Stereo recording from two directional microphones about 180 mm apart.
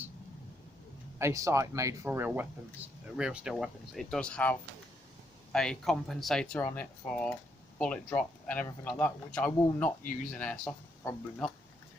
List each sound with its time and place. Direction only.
1.2 s speech: 15° right (ahead or behind); by 9.9 s 5° left (ahead or behind)
10.0 s speech: 50° left (ahead or behind)
10.3 s speech: 5° left (ahead or behind)